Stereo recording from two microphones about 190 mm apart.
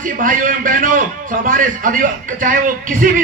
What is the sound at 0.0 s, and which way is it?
A man's voice, 45° right (ahead or behind).